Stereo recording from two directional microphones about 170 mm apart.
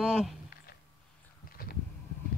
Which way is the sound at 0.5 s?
65° left (ahead or behind).